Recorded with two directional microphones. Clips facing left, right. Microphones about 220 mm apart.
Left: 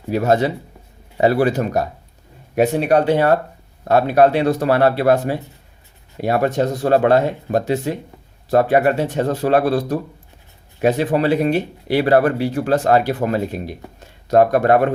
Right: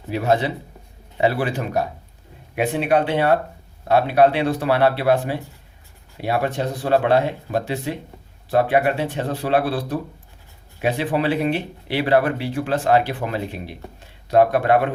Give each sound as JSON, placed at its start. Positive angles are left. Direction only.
{"t": 0.1, "sound": "speech", "side_deg": 45}